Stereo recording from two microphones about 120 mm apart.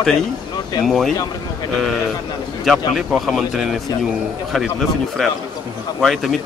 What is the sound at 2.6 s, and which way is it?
Speech, centre (ahead or behind).